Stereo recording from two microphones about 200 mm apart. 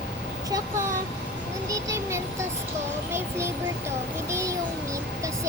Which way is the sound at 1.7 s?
15° right (ahead or behind).